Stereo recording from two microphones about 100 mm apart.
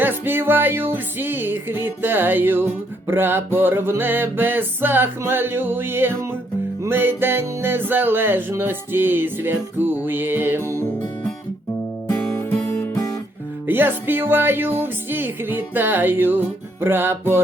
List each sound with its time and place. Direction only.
0.0 s music: 20° right (ahead or behind)
12.1 s music: 25° left (ahead or behind)
13.7 s music: 20° right (ahead or behind)